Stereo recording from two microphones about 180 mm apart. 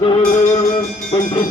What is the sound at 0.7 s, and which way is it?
Speech, 25° left (ahead or behind).